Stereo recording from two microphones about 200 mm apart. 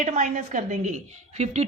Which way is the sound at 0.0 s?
40° right (ahead or behind).